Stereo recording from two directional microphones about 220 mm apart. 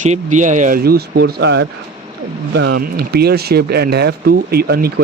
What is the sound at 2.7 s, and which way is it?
Speech, 45° right (ahead or behind).